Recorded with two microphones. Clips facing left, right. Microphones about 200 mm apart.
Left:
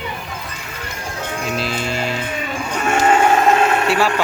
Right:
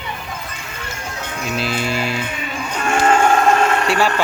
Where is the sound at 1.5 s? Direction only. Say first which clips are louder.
Right 3 dB; 5° right (ahead or behind).